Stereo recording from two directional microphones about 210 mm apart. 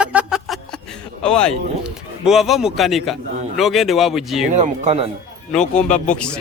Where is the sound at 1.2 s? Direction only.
5° left (ahead or behind).